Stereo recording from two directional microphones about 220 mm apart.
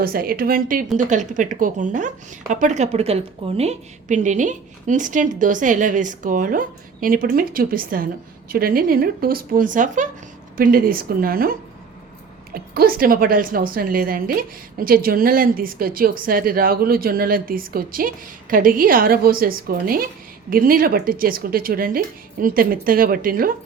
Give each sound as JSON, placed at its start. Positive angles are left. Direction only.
{"t": 0.0, "sound": "a woman's voice", "side_deg": -40}